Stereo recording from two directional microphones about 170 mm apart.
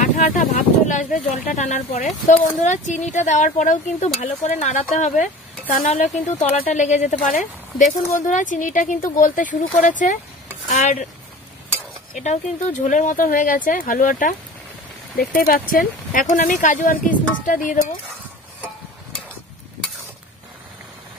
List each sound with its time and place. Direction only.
0.0 s speech: 50° left (ahead or behind)
12.1 s speech: 45° left (ahead or behind)